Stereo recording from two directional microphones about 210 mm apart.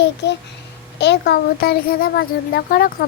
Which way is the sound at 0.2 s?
55° left (ahead or behind).